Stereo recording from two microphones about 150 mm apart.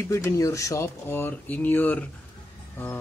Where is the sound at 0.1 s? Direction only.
20° left (ahead or behind).